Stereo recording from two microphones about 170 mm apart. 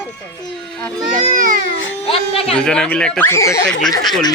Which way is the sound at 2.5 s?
5° left (ahead or behind).